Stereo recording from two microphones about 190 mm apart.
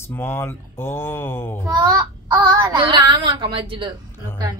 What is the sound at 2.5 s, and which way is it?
A woman's voice, 25° right (ahead or behind).